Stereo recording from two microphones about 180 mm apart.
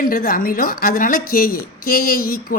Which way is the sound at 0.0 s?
50° left (ahead or behind).